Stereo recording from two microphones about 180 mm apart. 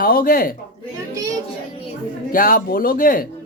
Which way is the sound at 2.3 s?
50° left (ahead or behind).